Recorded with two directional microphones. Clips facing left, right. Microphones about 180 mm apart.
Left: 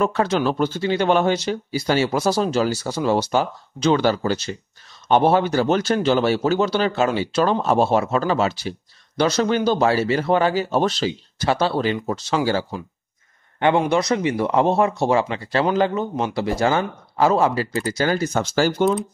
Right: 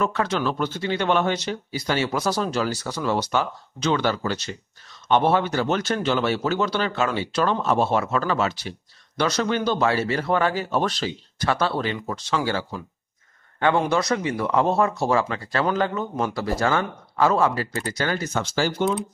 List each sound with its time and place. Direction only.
0.0 s speech: 35° left (ahead or behind)
13.6 s speech: 20° left (ahead or behind); by 18.9 s 45° left (ahead or behind)